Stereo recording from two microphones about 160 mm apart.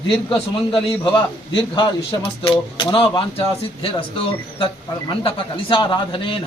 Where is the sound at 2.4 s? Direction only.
30° left (ahead or behind).